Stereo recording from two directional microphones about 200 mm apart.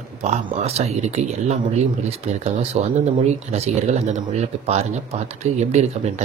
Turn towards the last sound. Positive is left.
turn(degrees=-35)  # may be behind; listen again after turning